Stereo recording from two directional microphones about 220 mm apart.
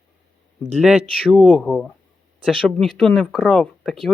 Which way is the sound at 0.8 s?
Centre (ahead or behind).